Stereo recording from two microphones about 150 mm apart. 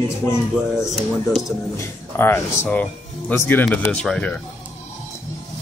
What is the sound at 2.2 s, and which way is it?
Speech, 10° left (ahead or behind).